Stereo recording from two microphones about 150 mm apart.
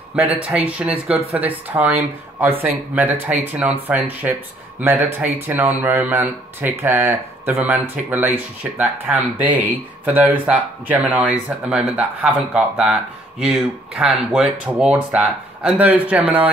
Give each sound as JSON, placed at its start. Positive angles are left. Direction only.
{"t": 0.1, "sound": "speech", "side_deg": -10}